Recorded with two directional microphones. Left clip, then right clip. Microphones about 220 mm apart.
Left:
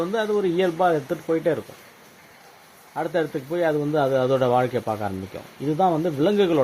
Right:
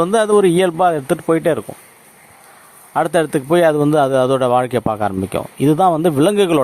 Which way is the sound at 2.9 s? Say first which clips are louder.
Right 9 dB; 45° right (ahead or behind).